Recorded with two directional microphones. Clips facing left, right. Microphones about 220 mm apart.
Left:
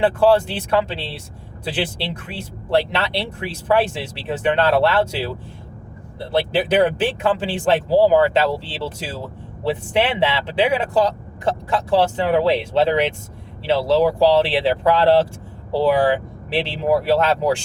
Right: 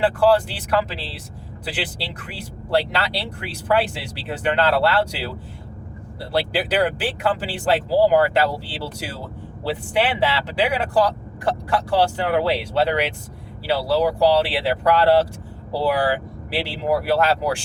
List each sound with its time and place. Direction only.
0.0 s speech: 25° left (ahead or behind)